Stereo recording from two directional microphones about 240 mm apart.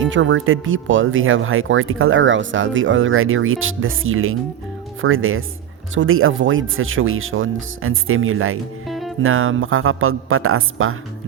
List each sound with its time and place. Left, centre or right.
0.0 s speech: right
8.9 s music: centre
9.2 s speech: right